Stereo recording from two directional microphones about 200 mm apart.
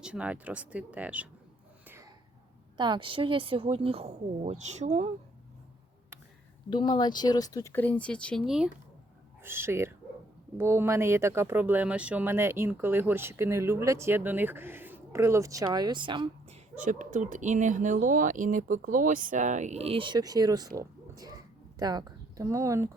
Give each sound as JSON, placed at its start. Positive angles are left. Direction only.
{"t": 0.0, "sound": "speech", "side_deg": -5}
{"t": 1.9, "sound": "a sound", "side_deg": -15}
{"t": 2.7, "sound": "speech", "side_deg": -25}
{"t": 6.7, "sound": "speech", "side_deg": 25}
{"t": 16.7, "sound": "speech", "side_deg": -40}